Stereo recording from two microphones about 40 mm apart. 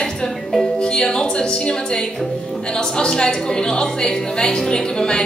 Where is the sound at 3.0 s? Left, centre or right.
Centre.